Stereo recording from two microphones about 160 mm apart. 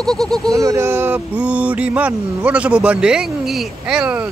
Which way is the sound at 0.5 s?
20° right (ahead or behind).